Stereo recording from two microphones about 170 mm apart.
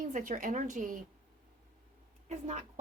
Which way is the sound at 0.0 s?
50° right (ahead or behind).